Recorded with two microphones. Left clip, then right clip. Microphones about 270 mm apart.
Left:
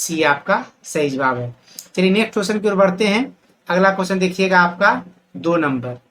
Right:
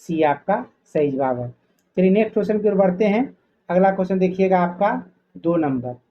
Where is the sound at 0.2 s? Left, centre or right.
Left.